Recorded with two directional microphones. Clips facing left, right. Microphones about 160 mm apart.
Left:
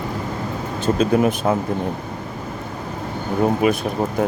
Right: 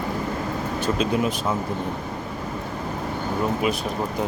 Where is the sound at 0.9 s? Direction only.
50° left (ahead or behind).